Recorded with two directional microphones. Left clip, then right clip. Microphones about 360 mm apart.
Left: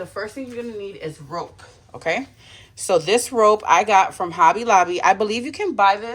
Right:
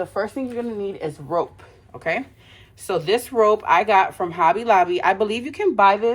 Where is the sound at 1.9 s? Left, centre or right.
Centre.